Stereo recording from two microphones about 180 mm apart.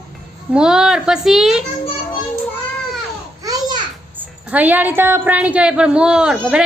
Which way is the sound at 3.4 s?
20° right (ahead or behind).